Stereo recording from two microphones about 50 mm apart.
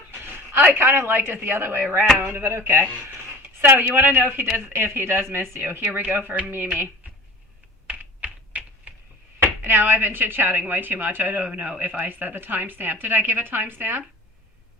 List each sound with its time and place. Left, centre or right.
0.2 s speech: right
3.8 s a woman's voice: right
7.9 s typing: right
9.4 s a woman's voice: right
11.4 s a woman's voice: right